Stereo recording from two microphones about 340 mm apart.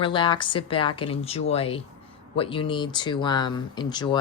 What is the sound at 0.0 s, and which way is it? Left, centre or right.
Speech, centre.